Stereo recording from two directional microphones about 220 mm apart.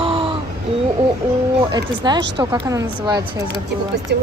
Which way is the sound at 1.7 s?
20° right (ahead or behind).